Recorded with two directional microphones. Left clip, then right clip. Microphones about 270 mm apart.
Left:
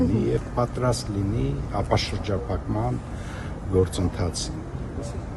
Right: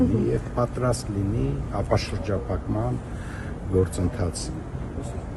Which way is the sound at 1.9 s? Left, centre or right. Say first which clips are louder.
Even; centre.